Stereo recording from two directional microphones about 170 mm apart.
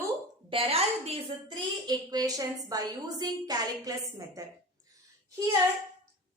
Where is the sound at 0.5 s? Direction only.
35° right (ahead or behind).